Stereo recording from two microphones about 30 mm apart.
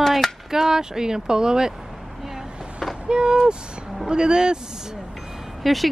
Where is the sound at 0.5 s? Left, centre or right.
Centre.